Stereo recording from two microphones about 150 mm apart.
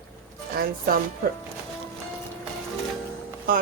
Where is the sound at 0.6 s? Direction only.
75° right (ahead or behind).